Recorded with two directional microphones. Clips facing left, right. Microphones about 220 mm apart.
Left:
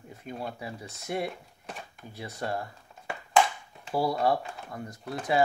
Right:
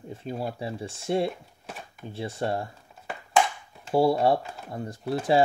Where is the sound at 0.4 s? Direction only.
30° right (ahead or behind).